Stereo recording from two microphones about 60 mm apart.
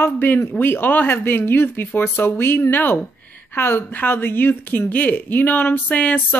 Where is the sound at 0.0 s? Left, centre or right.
Left.